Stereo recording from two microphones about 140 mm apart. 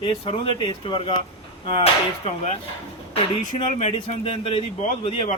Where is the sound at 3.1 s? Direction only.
50° left (ahead or behind).